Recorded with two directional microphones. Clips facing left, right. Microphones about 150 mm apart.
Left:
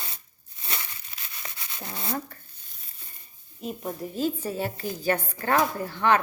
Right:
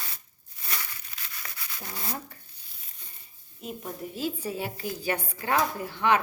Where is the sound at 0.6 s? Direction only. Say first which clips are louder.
Left 1 dB; 25° left (ahead or behind).